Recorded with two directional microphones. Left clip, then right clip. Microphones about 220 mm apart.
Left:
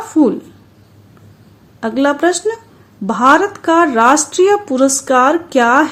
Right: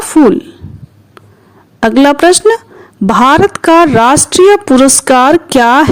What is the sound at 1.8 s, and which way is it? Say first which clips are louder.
Speech: right 8 dB; 45° right (ahead or behind).